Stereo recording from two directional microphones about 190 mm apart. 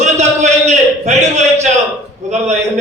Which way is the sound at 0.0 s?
35° right (ahead or behind).